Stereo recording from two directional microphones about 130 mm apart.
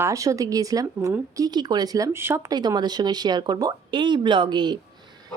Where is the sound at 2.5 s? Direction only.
30° right (ahead or behind).